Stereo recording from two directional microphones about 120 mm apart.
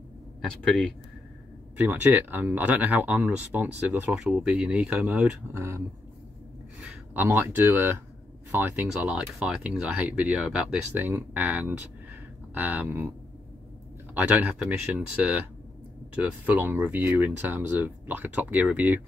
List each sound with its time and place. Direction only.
1.8 s speech: 15° right (ahead or behind)
5.5 s speech: 20° right (ahead or behind)
6.8 s speech: 20° right (ahead or behind)
14.1 s speech: 15° right (ahead or behind)